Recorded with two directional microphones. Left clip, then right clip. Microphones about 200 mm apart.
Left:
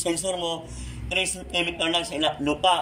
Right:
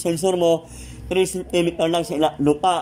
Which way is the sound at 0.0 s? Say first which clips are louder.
Right 8 dB; 45° right (ahead or behind).